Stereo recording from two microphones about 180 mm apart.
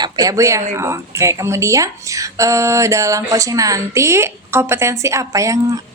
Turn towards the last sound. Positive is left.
turn(degrees=-20)  # may be behind; listen again after turning